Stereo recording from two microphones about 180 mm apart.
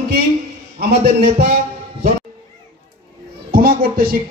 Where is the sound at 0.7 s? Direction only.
50° right (ahead or behind).